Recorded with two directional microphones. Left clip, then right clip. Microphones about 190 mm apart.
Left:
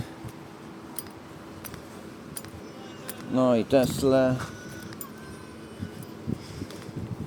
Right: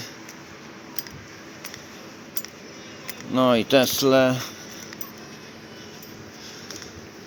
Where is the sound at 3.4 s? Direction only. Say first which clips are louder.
Right 4 dB; centre (ahead or behind).